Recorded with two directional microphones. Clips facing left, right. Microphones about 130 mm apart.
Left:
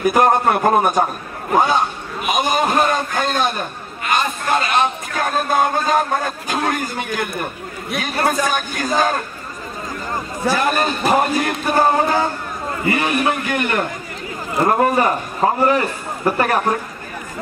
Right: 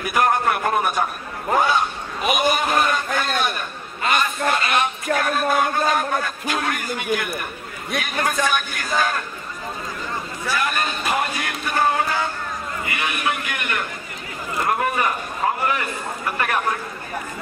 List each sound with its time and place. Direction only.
0.0 s a man's voice: 30° left (ahead or behind)
2.3 s a sound: 30° left (ahead or behind)
4.2 s music: 30° left (ahead or behind)
8.0 s a man's voice: 35° left (ahead or behind)
10.4 s a man's voice: 35° left (ahead or behind)